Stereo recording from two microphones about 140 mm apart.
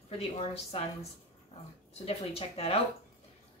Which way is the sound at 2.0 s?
45° left (ahead or behind).